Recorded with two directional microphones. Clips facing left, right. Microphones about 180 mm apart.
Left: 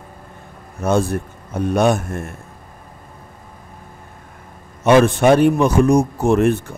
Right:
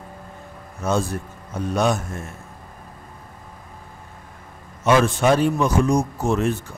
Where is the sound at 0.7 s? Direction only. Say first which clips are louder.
Left 5 dB; 60° left (ahead or behind).